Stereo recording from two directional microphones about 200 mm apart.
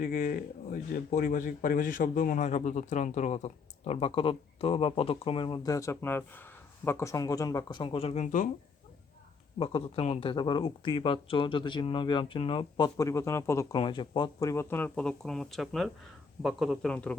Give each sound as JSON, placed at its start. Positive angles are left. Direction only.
{"t": 0.0, "sound": "speech", "side_deg": 45}
{"t": 9.6, "sound": "speech", "side_deg": 25}
{"t": 13.7, "sound": "a man's voice", "side_deg": 25}